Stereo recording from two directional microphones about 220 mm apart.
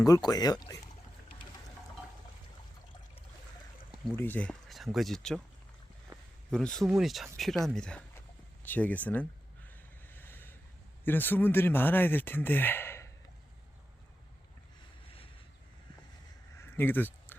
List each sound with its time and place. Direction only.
0.0 s speech: 15° left (ahead or behind)
4.0 s speech: 10° left (ahead or behind)
6.1 s a sound: 15° right (ahead or behind)
6.5 s speech: 5° left (ahead or behind)
9.6 s boat: 10° left (ahead or behind)
11.0 s speech: 10° left (ahead or behind)
16.6 s a sound: 10° left (ahead or behind)